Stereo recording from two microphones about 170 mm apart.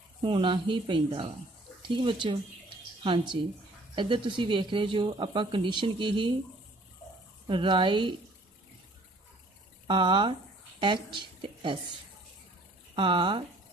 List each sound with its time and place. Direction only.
0.2 s speech: 30° right (ahead or behind)
7.4 s speech: 30° right (ahead or behind)
9.8 s a woman's voice: 30° right (ahead or behind)
12.9 s speech: 30° right (ahead or behind)